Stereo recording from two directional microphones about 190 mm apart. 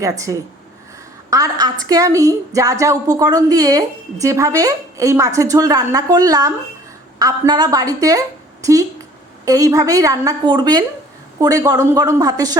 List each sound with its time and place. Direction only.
0.0 s a woman's voice: 15° right (ahead or behind)